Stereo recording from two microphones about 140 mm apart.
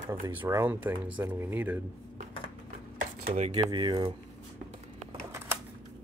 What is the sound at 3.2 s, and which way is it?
Speech, 55° right (ahead or behind).